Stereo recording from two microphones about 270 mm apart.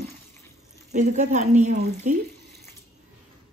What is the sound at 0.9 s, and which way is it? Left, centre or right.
A woman's voice, right.